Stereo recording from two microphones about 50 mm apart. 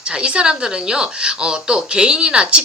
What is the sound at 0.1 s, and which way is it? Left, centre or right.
A woman's voice, centre.